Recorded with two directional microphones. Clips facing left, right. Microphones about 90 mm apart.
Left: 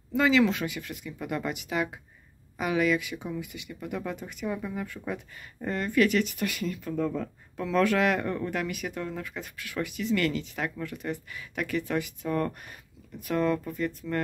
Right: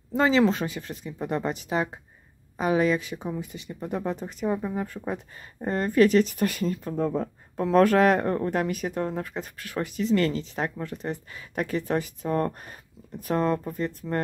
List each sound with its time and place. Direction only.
0.1 s speech: 35° right (ahead or behind)